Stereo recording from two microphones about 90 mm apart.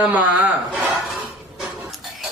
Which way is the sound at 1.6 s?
Centre (ahead or behind).